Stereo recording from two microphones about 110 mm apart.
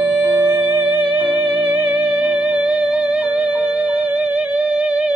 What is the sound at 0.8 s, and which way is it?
Music, 15° right (ahead or behind).